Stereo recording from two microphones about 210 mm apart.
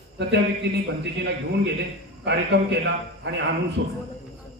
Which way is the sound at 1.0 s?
55° right (ahead or behind).